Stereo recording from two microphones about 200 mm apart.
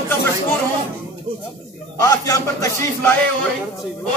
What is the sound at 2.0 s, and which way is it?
Speech, 15° left (ahead or behind).